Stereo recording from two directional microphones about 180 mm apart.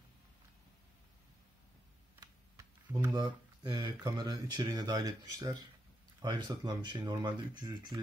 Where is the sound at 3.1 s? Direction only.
25° right (ahead or behind).